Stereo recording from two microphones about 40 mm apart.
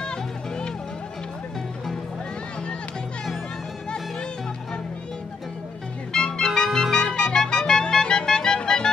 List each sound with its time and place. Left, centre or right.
0.0 s music: left
6.1 s music: centre